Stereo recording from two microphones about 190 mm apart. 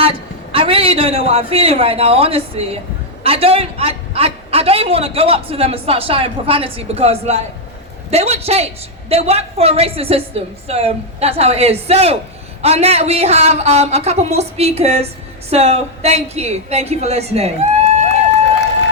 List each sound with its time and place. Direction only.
0.0 s a man's voice: 30° right (ahead or behind)